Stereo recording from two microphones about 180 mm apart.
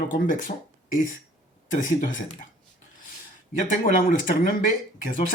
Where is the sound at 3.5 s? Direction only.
50° left (ahead or behind).